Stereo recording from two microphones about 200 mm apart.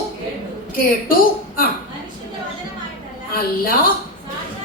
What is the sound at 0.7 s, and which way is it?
A woman's voice, 45° left (ahead or behind).